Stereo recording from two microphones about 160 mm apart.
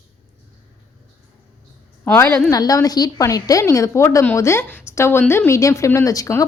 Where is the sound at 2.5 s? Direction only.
20° left (ahead or behind).